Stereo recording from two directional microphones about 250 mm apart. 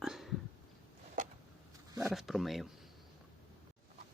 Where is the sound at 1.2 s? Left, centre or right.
Right.